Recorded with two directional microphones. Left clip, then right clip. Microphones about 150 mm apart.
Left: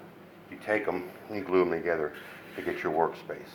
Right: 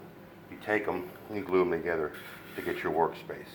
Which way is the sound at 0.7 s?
35° left (ahead or behind).